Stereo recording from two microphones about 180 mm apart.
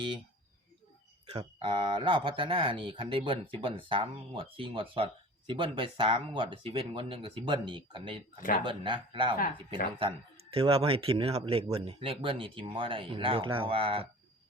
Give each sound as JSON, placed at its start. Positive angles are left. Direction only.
{"t": 1.5, "sound": "speech", "side_deg": -25}
{"t": 8.4, "sound": "speech", "side_deg": 50}
{"t": 8.6, "sound": "speech", "side_deg": -25}
{"t": 10.5, "sound": "speech", "side_deg": -30}